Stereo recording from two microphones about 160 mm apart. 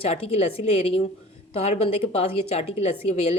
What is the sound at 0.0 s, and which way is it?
A woman's voice, 40° left (ahead or behind).